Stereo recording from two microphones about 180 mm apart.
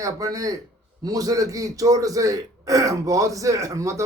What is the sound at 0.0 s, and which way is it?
Speech, 20° right (ahead or behind).